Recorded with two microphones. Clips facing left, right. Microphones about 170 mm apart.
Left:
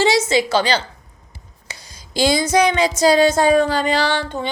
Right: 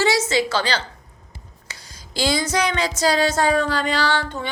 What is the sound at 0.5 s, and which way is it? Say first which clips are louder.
Speech: left 5 dB; 15° left (ahead or behind).